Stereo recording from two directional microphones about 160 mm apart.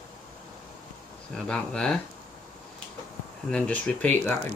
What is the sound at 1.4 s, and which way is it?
Speech, 5° left (ahead or behind).